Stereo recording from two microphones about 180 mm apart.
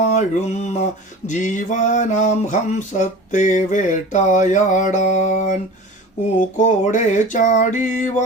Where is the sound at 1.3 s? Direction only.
45° left (ahead or behind).